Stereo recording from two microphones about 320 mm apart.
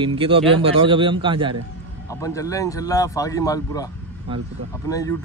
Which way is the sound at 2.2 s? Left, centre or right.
Centre.